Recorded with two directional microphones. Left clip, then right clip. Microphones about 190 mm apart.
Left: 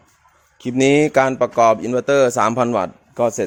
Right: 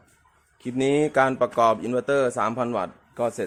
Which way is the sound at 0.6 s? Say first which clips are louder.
Left 7 dB; 45° left (ahead or behind).